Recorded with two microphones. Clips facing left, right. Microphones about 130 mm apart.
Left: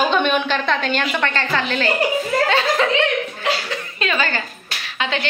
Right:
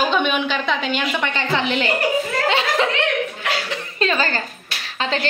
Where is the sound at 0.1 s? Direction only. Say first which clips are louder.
Left 2 dB; 5° right (ahead or behind); by 2.9 s 20° right (ahead or behind).